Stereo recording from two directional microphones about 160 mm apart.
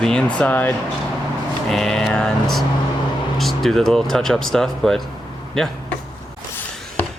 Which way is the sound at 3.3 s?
Centre (ahead or behind).